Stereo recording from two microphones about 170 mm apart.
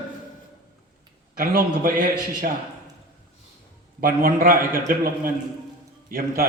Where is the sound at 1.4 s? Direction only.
55° right (ahead or behind).